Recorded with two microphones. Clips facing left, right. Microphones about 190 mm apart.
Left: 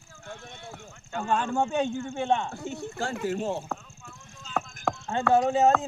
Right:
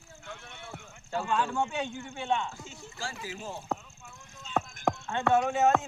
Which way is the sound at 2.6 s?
60° left (ahead or behind).